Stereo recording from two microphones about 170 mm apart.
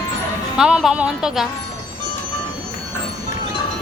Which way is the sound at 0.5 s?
5° right (ahead or behind).